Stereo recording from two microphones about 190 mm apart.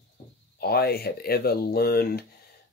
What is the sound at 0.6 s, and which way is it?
Speech, 55° left (ahead or behind).